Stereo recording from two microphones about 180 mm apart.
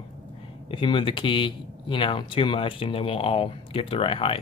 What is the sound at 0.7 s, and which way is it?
Speech, 30° left (ahead or behind).